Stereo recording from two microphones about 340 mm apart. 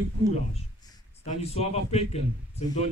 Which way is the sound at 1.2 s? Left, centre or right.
Centre.